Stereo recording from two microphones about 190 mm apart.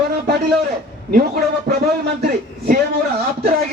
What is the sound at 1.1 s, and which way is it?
Speech, 50° right (ahead or behind).